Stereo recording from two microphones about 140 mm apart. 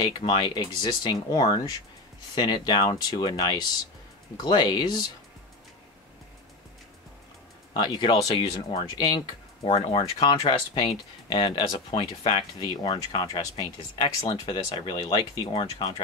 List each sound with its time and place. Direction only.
0.0 s speech: 35° left (ahead or behind)
7.7 s speech: 35° left (ahead or behind)
9.8 s speech: 45° left (ahead or behind)